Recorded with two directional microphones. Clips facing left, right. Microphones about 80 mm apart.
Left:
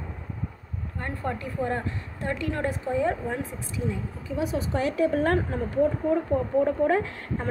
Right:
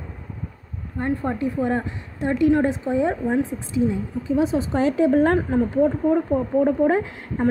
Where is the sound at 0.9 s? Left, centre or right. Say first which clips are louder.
Right 8 dB; right.